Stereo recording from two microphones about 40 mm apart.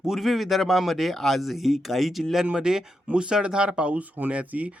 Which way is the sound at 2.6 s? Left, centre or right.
Centre.